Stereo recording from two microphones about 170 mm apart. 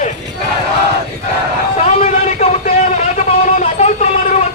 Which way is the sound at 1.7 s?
40° left (ahead or behind).